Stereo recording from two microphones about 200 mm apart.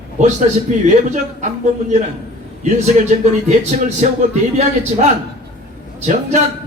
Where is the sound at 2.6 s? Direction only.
35° right (ahead or behind).